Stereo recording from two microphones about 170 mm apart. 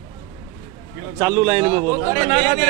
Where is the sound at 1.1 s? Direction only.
20° right (ahead or behind).